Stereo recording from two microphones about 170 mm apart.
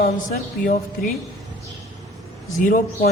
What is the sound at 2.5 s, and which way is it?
Speech, 50° left (ahead or behind).